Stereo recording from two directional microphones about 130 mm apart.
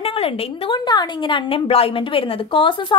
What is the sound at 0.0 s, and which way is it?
Speech, 45° left (ahead or behind).